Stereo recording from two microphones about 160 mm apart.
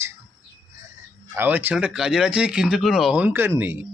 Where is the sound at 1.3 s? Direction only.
10° right (ahead or behind).